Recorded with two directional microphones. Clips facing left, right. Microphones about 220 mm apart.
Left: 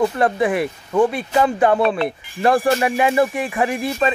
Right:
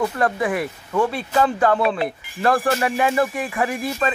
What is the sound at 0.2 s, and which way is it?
Speech, 25° left (ahead or behind).